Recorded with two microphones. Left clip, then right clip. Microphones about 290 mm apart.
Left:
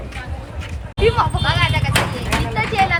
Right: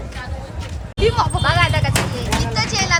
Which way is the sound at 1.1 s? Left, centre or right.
Centre.